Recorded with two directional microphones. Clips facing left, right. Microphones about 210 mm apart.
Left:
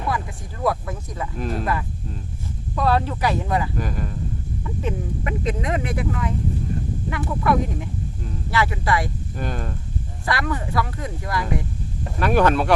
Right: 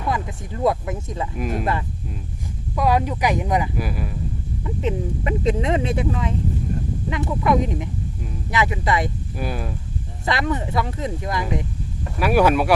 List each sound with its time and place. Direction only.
0.1 s speech: 20° right (ahead or behind)
1.4 s speech: 10° right (ahead or behind)
2.7 s speech: 10° right (ahead or behind)
4.6 s speech: 20° right (ahead or behind)
9.3 s speech: 10° right (ahead or behind)
10.2 s speech: 20° right (ahead or behind)
12.2 s speech: 10° right (ahead or behind)